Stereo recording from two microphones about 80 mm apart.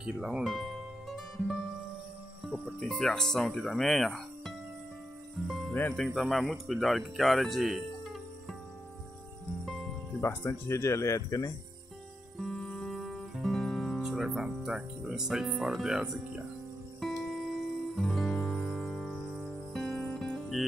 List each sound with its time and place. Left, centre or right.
0.0 s speech: centre
0.4 s music: centre
2.6 s speech: centre
5.5 s music: centre
5.9 s speech: centre
9.7 s music: centre
10.2 s speech: left
12.4 s music: centre